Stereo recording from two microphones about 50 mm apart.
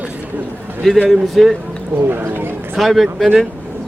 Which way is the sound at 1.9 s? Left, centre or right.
Right.